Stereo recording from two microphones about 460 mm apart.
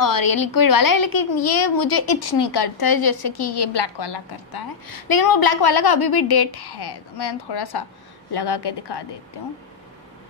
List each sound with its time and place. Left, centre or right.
0.0 s a woman's voice: left